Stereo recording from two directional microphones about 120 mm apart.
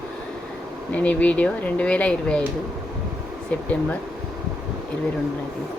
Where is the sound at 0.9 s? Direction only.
10° left (ahead or behind).